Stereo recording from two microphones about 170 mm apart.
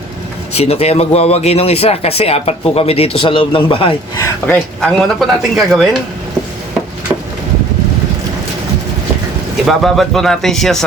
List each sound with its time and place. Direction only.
0.5 s speech: 40° left (ahead or behind)
4.4 s speech: 5° left (ahead or behind)
9.6 s speech: centre (ahead or behind)